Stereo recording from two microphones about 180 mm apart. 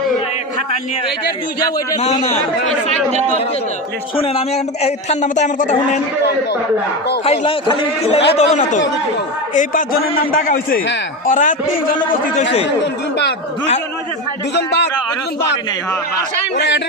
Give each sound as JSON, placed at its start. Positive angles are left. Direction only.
{"t": 2.0, "sound": "a man's voice", "side_deg": 35}
{"t": 4.2, "sound": "a man's voice", "side_deg": 35}
{"t": 7.3, "sound": "a man's voice", "side_deg": 30}
{"t": 9.6, "sound": "a man's voice", "side_deg": 50}
{"t": 12.8, "sound": "speech", "side_deg": 70}
{"t": 14.5, "sound": "speech", "side_deg": 70}
{"t": 16.6, "sound": "speech", "side_deg": 70}